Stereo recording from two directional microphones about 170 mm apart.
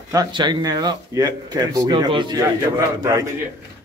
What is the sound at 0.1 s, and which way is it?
A man's voice, 25° right (ahead or behind).